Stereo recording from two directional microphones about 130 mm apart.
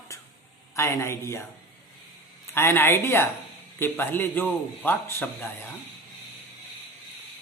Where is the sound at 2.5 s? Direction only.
20° left (ahead or behind).